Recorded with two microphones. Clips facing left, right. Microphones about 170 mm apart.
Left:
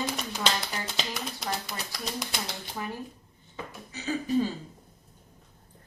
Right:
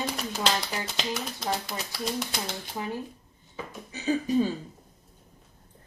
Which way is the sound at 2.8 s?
15° right (ahead or behind).